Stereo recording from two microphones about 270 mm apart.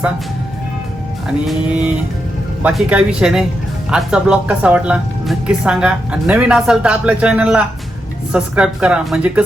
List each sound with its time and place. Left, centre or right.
1.5 s speech: centre